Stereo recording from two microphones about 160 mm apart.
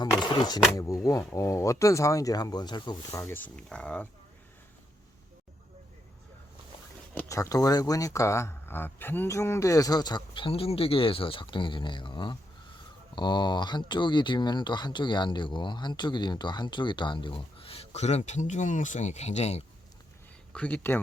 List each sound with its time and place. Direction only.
0.0 s speech: 25° left (ahead or behind)
1.0 s speech: 15° left (ahead or behind)
7.1 s speech: 15° left (ahead or behind); by 19.6 s 45° left (ahead or behind)
20.5 s speech: 10° left (ahead or behind)